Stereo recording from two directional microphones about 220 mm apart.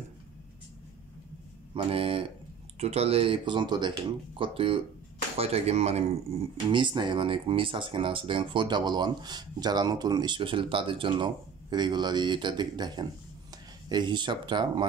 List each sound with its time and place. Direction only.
1.7 s speech: 25° right (ahead or behind)